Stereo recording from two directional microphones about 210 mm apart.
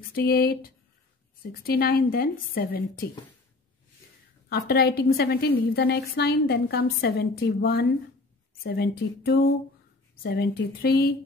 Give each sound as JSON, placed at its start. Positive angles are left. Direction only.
{"t": 0.1, "sound": "a woman's voice", "side_deg": 45}
{"t": 1.6, "sound": "a woman's voice", "side_deg": 45}
{"t": 4.5, "sound": "a woman's voice", "side_deg": 50}